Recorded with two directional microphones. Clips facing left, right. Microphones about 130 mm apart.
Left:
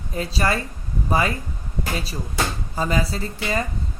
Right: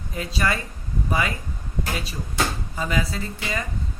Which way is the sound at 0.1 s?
35° left (ahead or behind).